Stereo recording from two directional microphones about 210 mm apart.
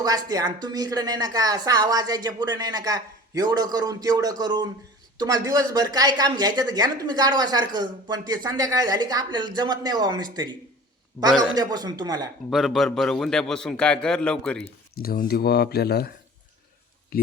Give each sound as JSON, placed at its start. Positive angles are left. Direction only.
{"t": 0.0, "sound": "a woman's voice", "side_deg": -20}
{"t": 11.5, "sound": "speech", "side_deg": -20}
{"t": 12.5, "sound": "a man's voice", "side_deg": 0}
{"t": 14.9, "sound": "speech", "side_deg": 45}